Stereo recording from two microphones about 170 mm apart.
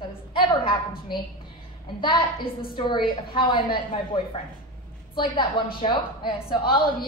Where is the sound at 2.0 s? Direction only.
30° left (ahead or behind).